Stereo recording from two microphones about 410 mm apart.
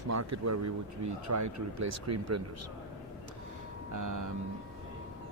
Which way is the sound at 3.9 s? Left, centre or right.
Right.